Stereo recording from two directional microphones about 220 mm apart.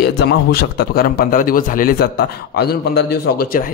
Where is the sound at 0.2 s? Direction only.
50° left (ahead or behind).